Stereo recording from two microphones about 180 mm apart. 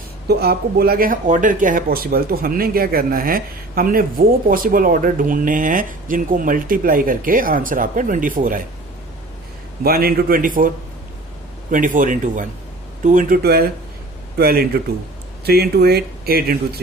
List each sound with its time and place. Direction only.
0.3 s speech: 60° right (ahead or behind)
9.8 s speech: 55° right (ahead or behind)
11.7 s speech: 45° right (ahead or behind)